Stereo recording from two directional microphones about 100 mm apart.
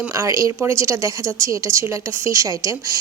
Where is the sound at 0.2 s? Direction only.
35° right (ahead or behind).